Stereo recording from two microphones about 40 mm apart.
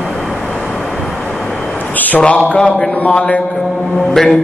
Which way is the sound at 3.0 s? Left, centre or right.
Left.